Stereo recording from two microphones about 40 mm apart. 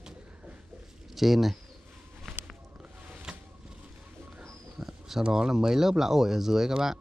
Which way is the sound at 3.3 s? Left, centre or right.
Centre.